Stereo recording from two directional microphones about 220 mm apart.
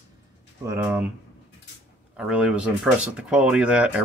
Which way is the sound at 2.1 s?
5° right (ahead or behind).